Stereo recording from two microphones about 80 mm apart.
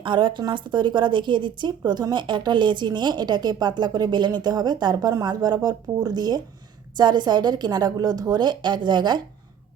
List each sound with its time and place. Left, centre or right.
0.0 s a woman's voice: right